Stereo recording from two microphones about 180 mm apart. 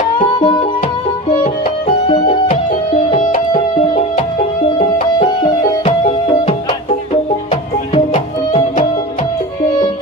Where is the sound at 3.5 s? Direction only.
35° left (ahead or behind).